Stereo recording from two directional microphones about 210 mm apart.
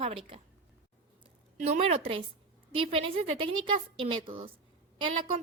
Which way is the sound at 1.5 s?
30° right (ahead or behind).